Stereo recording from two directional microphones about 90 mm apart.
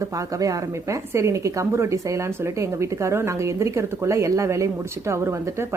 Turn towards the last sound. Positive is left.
turn(degrees=-35)  # may be behind; listen again after turning